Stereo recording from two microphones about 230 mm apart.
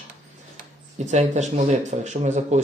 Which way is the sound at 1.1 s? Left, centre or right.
Right.